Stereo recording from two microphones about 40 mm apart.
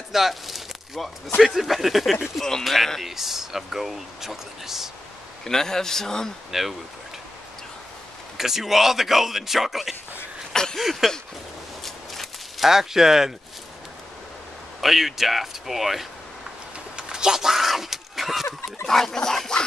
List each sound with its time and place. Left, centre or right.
0.1 s a sound: centre
1.6 s speech: centre
5.4 s speech: centre
6.5 s speech: centre
8.4 s speech: centre
10.5 s a sound: centre
10.8 s speech: centre
11.8 s walk: centre
12.6 s speech: centre
14.8 s speech: centre
16.9 s a sound: centre
18.9 s speech: centre